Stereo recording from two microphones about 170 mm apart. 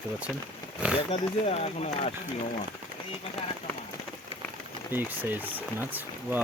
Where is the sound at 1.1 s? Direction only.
35° left (ahead or behind).